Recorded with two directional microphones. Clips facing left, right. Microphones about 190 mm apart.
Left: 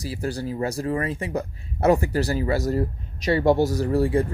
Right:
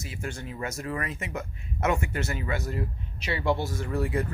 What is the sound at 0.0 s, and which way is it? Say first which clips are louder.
Speech: left 8 dB; 35° left (ahead or behind).